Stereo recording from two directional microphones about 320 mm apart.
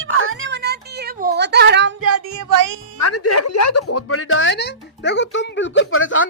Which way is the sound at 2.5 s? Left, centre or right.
Right.